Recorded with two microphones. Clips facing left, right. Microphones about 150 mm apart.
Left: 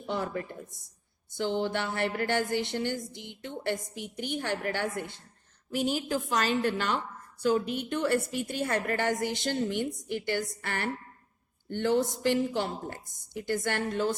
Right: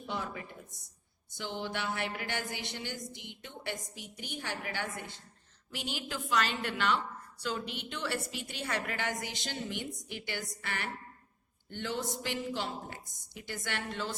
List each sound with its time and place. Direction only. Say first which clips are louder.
0.0 s a woman's voice: left 6 dB; 50° left (ahead or behind)